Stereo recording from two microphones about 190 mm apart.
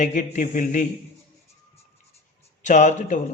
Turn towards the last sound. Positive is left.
turn(degrees=40)  # may be behind; listen again after turning